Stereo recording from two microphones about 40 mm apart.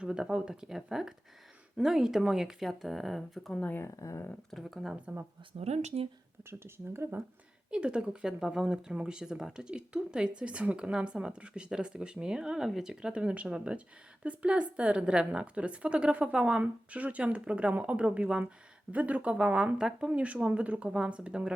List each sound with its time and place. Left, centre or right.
0.0 s speech: right; by 3.5 s centre
4.5 s speech: centre
6.5 s speech: right
7.7 s speech: right